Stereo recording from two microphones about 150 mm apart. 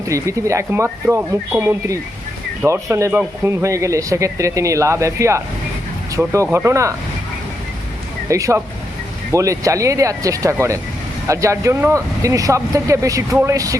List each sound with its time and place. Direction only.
0.1 s speech: 20° right (ahead or behind)
8.3 s speech: 20° right (ahead or behind)